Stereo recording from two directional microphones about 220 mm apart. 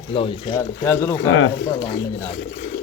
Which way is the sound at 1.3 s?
70° left (ahead or behind).